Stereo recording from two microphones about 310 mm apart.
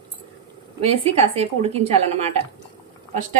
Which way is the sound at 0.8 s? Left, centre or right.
Centre.